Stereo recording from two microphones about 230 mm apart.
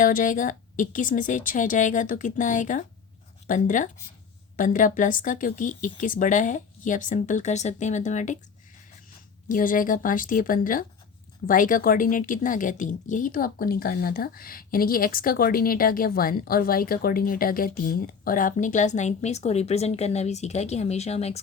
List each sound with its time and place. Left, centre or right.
0.0 s speech: left
9.5 s speech: left